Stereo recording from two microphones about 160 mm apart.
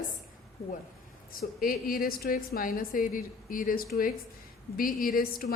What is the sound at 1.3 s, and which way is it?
A woman's voice, 65° left (ahead or behind).